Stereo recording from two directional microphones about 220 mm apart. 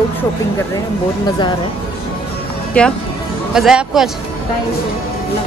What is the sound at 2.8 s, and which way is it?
A man's voice, 5° left (ahead or behind).